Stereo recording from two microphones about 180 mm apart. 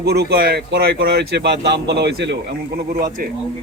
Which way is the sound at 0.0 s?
65° right (ahead or behind).